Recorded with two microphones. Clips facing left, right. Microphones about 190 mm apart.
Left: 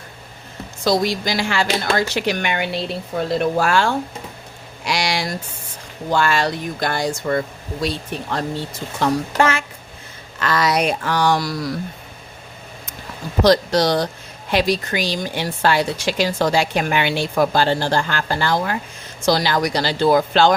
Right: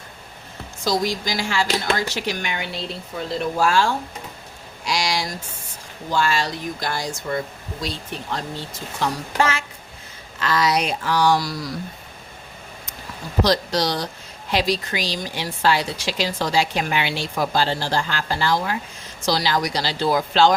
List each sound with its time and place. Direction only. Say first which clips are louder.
0.9 s speech: left 4 dB; 65° left (ahead or behind)
13.4 s a woman's voice: left 5 dB; 55° left (ahead or behind)